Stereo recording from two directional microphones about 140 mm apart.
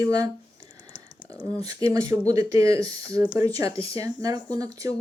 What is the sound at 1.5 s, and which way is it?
Speech, 25° right (ahead or behind).